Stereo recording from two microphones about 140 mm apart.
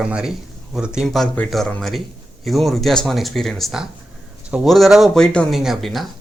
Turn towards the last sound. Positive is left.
turn(degrees=0)  # may be behind; listen again after turning